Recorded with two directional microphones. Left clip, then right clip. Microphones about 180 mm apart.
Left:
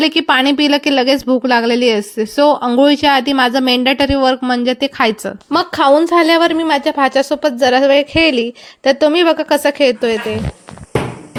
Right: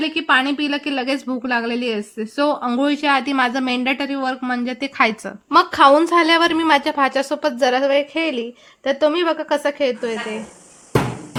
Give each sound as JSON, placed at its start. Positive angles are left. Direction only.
{"t": 0.0, "sound": "a woman's voice", "side_deg": 35}
{"t": 5.5, "sound": "a woman's voice", "side_deg": 15}